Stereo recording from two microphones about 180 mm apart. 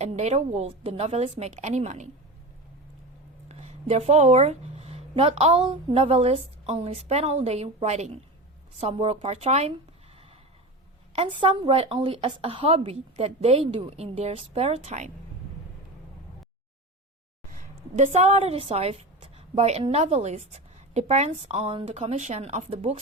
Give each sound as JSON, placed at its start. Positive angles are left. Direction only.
{"t": 0.0, "sound": "a woman's voice", "side_deg": -35}
{"t": 3.5, "sound": "a woman's voice", "side_deg": -35}
{"t": 11.1, "sound": "a woman's voice", "side_deg": -30}
{"t": 17.5, "sound": "a woman's voice", "side_deg": -45}